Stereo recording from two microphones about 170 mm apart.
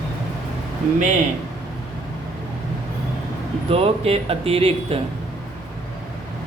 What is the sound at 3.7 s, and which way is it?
Speech, 35° right (ahead or behind).